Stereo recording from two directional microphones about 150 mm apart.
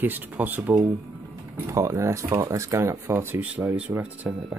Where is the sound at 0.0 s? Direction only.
10° right (ahead or behind).